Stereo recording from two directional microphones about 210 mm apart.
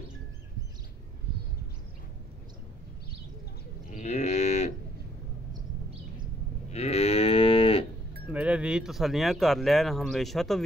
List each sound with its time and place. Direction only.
3.9 s moo: 35° left (ahead or behind)
6.7 s moo: 30° left (ahead or behind)
8.3 s speech: 5° right (ahead or behind)